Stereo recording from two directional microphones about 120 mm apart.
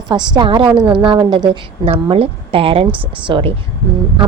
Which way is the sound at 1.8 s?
55° right (ahead or behind).